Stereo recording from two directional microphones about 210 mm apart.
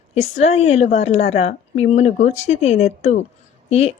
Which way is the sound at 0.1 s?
30° left (ahead or behind).